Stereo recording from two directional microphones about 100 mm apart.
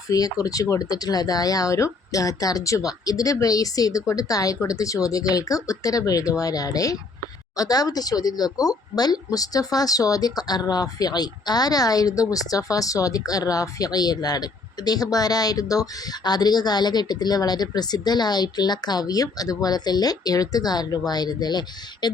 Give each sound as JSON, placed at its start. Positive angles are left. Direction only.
{"t": 0.1, "sound": "speech", "side_deg": 35}